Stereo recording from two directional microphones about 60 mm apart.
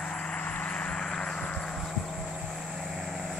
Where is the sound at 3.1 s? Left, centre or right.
Centre.